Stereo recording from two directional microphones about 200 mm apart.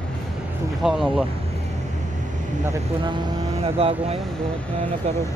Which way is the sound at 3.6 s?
30° right (ahead or behind).